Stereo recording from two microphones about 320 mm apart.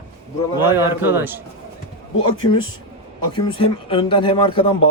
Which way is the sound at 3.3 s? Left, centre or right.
Centre.